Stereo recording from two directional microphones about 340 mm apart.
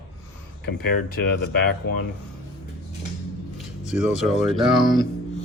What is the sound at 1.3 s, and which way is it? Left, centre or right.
Speech, left.